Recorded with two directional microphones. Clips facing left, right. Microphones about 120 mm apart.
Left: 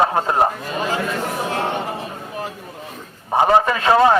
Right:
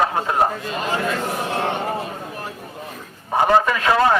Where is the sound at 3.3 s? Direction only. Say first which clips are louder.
Left 1 dB; 25° left (ahead or behind).